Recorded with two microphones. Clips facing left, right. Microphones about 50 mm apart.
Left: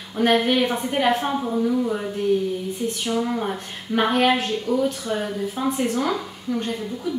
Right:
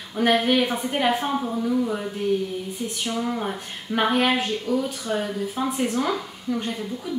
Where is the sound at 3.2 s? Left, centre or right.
Centre.